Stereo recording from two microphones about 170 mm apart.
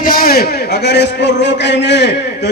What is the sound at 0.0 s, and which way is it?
A man's voice, 60° left (ahead or behind).